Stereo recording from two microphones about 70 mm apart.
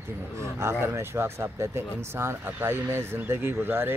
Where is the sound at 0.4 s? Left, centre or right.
Right.